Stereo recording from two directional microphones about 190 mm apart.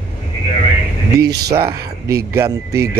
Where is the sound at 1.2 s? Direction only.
60° right (ahead or behind).